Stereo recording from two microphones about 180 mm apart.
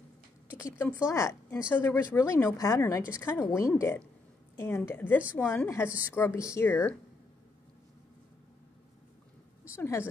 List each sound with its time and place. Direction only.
0.6 s a woman's voice: 15° left (ahead or behind)
9.8 s a woman's voice: 15° left (ahead or behind)